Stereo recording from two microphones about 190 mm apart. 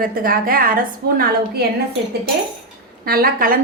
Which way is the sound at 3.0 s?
50° right (ahead or behind).